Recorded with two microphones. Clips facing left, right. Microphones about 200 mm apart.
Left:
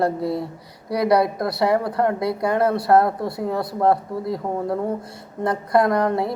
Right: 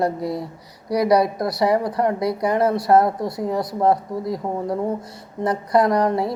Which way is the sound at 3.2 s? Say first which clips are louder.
Right 1 dB; 60° left (ahead or behind).